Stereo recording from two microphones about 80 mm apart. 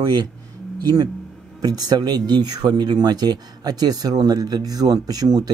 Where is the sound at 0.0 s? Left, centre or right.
Right.